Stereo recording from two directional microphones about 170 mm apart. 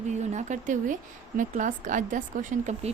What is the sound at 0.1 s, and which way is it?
A woman's voice, 45° right (ahead or behind).